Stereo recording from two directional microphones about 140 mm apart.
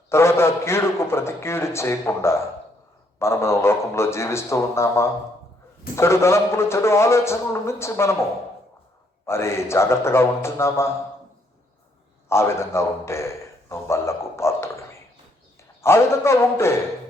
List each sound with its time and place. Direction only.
0.1 s a sound: 20° left (ahead or behind)
3.2 s a man's voice: 20° left (ahead or behind)
9.2 s a man's voice: 20° left (ahead or behind)
12.3 s a man's voice: 20° left (ahead or behind)